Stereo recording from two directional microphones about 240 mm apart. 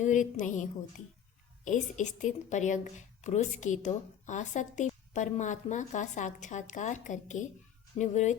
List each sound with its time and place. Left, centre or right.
0.0 s a woman's voice: left